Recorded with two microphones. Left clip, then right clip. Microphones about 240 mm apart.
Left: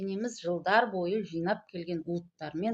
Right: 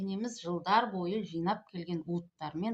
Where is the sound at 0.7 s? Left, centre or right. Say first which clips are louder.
Left 2 dB; left.